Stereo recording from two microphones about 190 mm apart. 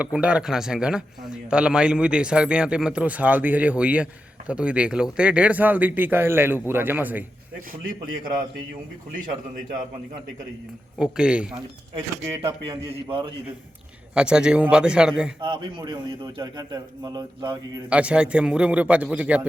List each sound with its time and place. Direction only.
0.0 s a man's voice: 5° right (ahead or behind)
11.0 s speech: 5° right (ahead or behind)
12.5 s a man's voice: 25° right (ahead or behind)
14.1 s speech: 5° right (ahead or behind)
15.4 s a man's voice: 25° right (ahead or behind)
17.8 s a man's voice: 5° right (ahead or behind)